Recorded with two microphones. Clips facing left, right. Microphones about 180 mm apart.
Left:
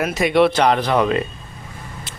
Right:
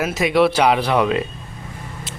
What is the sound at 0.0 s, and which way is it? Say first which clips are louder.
Speech: left 1 dB; centre (ahead or behind).